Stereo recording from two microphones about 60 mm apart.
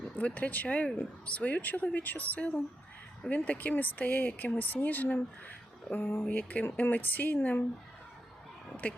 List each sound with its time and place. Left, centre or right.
0.2 s speech: left
6.2 s speech: left
8.8 s speech: left